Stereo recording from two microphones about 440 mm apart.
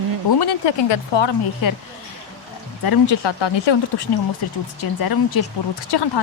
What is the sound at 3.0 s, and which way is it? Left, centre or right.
Speech, left.